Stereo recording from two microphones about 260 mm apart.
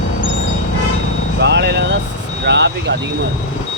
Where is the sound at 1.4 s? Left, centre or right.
Right.